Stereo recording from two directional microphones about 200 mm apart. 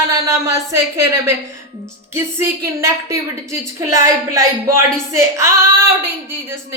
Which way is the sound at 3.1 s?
15° right (ahead or behind).